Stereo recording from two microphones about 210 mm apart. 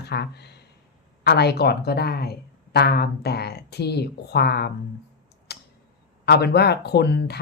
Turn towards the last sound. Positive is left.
turn(degrees=50)  # may be behind; listen again after turning